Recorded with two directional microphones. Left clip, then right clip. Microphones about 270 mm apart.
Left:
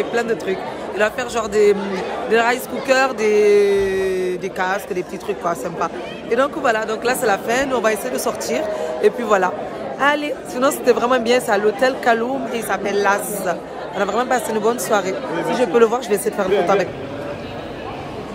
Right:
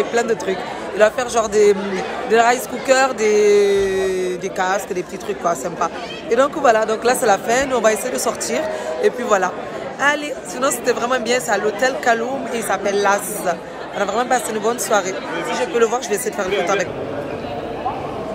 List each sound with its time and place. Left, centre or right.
0.1 s a woman's voice: centre
15.5 s speech: left